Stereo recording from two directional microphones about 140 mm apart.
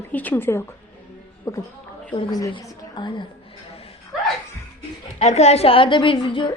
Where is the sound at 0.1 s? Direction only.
10° left (ahead or behind); by 3.2 s 35° left (ahead or behind).